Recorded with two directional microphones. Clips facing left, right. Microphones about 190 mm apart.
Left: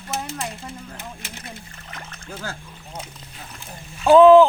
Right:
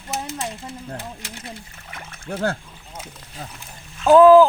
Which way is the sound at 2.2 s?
60° right (ahead or behind).